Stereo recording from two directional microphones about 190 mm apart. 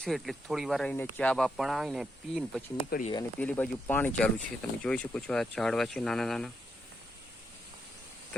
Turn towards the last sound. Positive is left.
turn(degrees=0)  # may be behind; listen again after turning